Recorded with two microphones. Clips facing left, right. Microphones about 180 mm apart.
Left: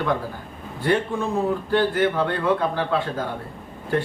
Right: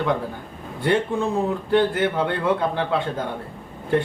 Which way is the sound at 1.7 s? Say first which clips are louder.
Right 2 dB; 20° right (ahead or behind).